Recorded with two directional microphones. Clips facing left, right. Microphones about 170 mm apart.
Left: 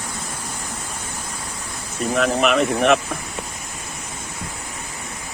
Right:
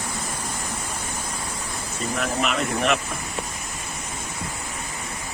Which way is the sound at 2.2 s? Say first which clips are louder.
Left 8 dB; 80° left.